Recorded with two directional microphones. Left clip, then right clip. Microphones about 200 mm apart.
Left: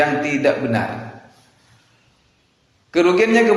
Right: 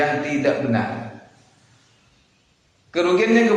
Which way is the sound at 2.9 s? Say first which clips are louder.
Left 3 dB; 40° left (ahead or behind).